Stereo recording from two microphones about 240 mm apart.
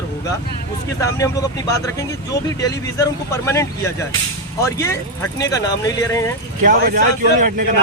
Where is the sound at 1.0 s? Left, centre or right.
Centre.